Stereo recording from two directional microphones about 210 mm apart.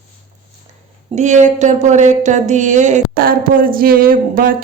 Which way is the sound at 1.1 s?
35° right (ahead or behind).